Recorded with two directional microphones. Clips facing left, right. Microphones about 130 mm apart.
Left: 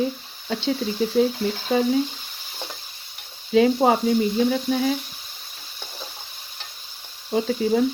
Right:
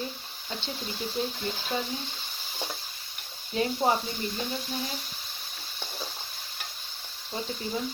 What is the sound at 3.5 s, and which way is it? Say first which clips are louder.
Speech: left 12 dB; 90° left.